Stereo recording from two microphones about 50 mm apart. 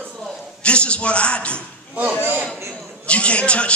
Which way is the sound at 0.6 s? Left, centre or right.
Left.